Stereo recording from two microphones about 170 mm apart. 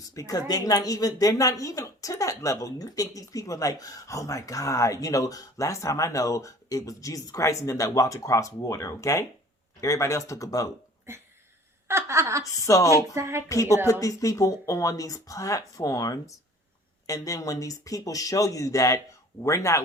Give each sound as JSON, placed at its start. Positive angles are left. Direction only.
{"t": 0.1, "sound": "speech", "side_deg": 20}
{"t": 11.9, "sound": "a woman's voice", "side_deg": -15}
{"t": 12.4, "sound": "speech", "side_deg": 20}
{"t": 12.9, "sound": "a woman's voice", "side_deg": -15}
{"t": 13.5, "sound": "speech", "side_deg": 20}